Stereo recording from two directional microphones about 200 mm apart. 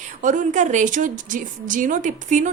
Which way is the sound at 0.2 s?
40° right (ahead or behind).